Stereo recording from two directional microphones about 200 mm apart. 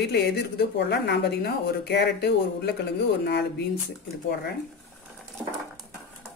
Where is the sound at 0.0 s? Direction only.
55° left (ahead or behind).